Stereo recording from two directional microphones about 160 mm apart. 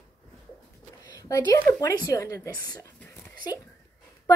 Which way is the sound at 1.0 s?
20° left (ahead or behind).